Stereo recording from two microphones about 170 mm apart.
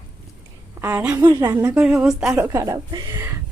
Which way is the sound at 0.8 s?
15° right (ahead or behind).